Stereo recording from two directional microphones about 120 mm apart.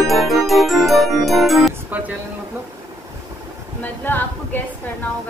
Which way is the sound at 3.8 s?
15° left (ahead or behind).